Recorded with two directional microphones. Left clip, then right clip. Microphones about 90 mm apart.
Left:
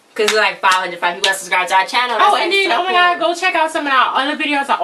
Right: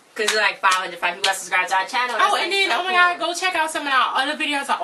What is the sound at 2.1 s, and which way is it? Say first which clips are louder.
A woman's voice: left 6 dB; 15° right (ahead or behind).